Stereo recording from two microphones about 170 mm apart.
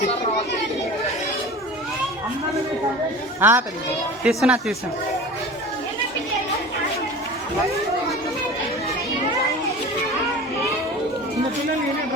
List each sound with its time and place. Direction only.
3.4 s speech: 10° right (ahead or behind)